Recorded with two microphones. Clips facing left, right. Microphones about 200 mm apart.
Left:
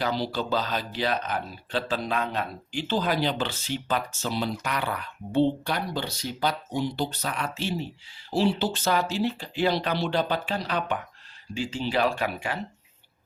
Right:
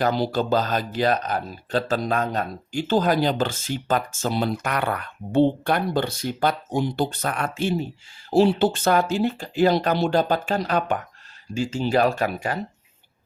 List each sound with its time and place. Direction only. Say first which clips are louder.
0.0 s speech: right 6 dB; 50° right (ahead or behind)